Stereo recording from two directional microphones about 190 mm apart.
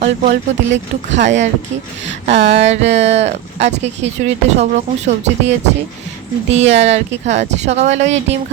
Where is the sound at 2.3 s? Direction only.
65° right (ahead or behind).